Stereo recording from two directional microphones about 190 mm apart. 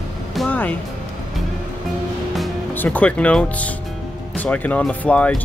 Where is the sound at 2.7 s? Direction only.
10° left (ahead or behind).